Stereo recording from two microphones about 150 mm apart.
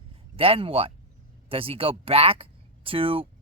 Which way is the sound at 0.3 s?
40° right (ahead or behind).